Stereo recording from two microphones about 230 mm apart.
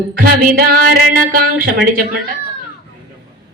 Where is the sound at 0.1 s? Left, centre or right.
Right.